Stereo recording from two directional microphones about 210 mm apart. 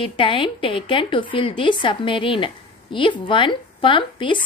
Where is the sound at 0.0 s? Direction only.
25° left (ahead or behind).